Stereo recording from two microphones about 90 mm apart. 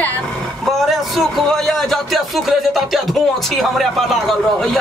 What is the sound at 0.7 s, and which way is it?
A man's voice, centre (ahead or behind).